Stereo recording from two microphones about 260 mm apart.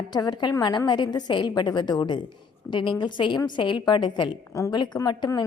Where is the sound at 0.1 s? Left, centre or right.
Centre.